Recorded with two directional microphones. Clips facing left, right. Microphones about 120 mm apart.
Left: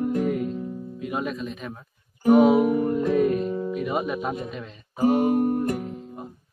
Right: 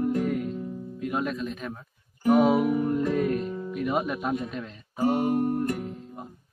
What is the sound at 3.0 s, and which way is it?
Music, 5° left (ahead or behind).